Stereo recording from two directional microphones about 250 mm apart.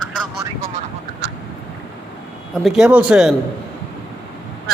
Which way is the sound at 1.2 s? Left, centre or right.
Right.